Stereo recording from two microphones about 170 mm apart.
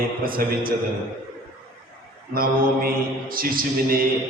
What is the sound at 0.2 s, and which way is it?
Mantra, 60° right (ahead or behind).